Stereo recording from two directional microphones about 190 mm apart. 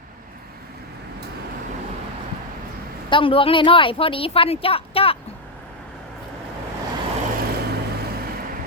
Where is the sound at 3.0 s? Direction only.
25° left (ahead or behind).